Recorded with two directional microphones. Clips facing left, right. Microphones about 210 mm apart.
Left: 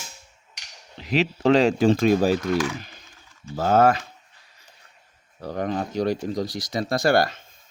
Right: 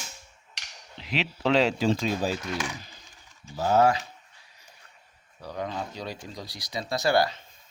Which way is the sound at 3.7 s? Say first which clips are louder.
Left 3 dB; 50° left (ahead or behind).